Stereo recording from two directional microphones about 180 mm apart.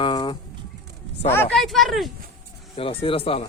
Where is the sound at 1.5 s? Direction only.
Centre (ahead or behind).